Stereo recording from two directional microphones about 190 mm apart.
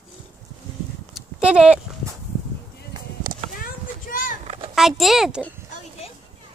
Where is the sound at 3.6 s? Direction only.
45° left (ahead or behind).